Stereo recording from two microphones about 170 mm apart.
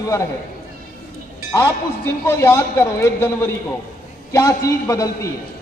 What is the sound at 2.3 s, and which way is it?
A man's voice, 15° left (ahead or behind).